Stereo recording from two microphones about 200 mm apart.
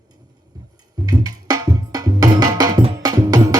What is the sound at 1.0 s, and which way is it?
Music, 20° right (ahead or behind).